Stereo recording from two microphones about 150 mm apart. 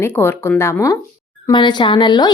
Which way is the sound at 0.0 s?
15° left (ahead or behind).